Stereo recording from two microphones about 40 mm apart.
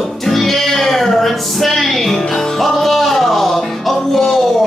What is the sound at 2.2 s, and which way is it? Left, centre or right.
Music, centre.